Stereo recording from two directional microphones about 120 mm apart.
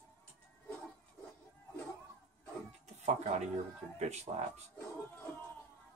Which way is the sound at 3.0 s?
70° right (ahead or behind).